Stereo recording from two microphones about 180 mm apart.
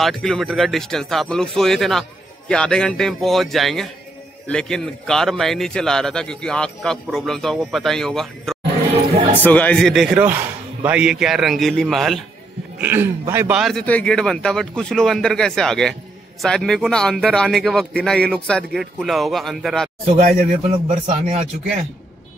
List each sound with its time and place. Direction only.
0.0 s a man's voice: centre (ahead or behind)
12.7 s a man's voice: 10° right (ahead or behind)
20.2 s speech: 55° right (ahead or behind)
20.6 s speech: 30° right (ahead or behind)